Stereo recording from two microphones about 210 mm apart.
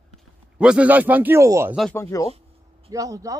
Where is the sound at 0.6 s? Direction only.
5° right (ahead or behind).